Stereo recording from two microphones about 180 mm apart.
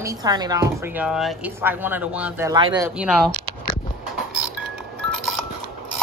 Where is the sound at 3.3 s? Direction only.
50° left (ahead or behind).